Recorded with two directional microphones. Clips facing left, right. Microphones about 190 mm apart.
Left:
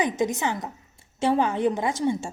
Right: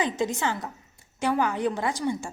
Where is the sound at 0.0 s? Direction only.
15° left (ahead or behind).